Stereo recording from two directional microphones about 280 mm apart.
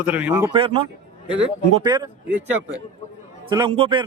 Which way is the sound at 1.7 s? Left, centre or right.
Centre.